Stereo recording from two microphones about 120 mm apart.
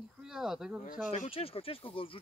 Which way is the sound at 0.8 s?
90° left.